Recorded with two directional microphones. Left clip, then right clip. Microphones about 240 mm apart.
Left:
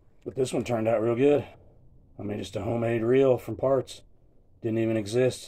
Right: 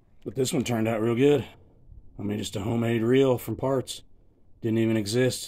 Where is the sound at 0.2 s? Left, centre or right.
Right.